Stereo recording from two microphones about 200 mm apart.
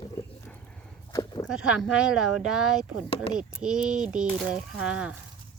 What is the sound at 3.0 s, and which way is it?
Speech, 30° left (ahead or behind).